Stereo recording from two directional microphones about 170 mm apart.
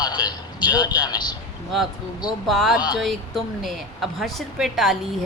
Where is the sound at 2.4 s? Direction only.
Centre (ahead or behind).